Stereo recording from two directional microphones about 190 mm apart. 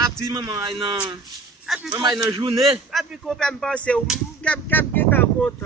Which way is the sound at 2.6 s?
Centre (ahead or behind).